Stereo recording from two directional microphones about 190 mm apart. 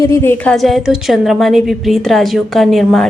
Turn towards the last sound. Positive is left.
turn(degrees=0)  # may be behind; listen again after turning